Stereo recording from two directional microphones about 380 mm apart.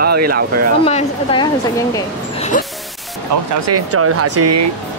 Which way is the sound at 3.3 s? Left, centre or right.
Right.